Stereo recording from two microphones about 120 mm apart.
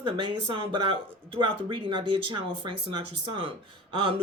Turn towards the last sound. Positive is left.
turn(degrees=-50)  # may be behind; listen again after turning